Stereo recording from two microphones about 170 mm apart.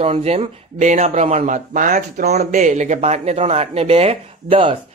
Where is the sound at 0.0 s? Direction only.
40° right (ahead or behind).